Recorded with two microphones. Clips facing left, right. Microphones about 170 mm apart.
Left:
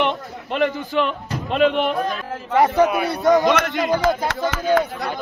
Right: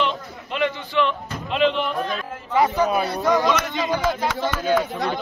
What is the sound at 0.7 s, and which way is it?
A man's voice, 40° left (ahead or behind).